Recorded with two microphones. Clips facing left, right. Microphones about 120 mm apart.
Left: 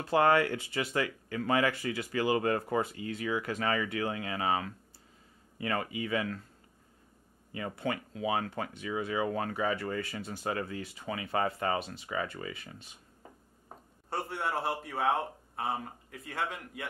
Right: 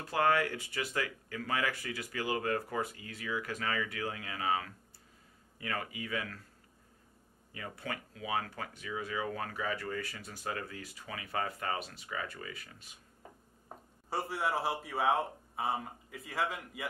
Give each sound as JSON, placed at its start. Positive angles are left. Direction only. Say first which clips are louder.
{"t": 0.1, "sound": "speech", "louder": "left 4 dB", "side_deg": 25}
{"t": 7.5, "sound": "speech", "louder": "left 7 dB", "side_deg": 25}
{"t": 14.1, "sound": "speech", "louder": "even", "side_deg": 0}